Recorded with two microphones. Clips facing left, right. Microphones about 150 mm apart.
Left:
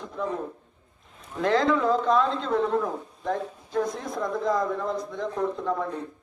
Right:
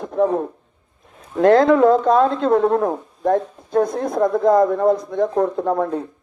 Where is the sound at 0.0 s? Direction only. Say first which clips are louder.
Right 14 dB; 55° right (ahead or behind).